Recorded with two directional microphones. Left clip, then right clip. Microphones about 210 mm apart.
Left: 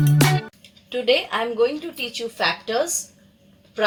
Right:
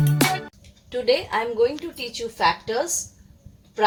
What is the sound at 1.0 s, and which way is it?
Speech, 20° right (ahead or behind).